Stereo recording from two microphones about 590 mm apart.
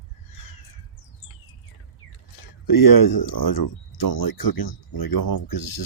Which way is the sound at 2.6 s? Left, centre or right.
Left.